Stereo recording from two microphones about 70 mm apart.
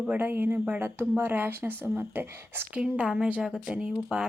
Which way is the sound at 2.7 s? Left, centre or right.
Centre.